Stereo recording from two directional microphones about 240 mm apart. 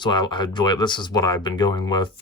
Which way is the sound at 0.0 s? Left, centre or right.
Centre.